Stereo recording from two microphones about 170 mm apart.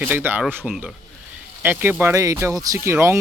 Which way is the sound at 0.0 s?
10° right (ahead or behind).